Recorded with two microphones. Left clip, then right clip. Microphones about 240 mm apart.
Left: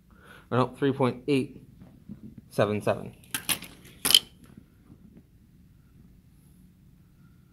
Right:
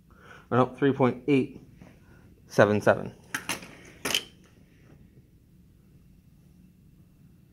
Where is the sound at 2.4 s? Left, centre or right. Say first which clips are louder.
Right 5 dB; right.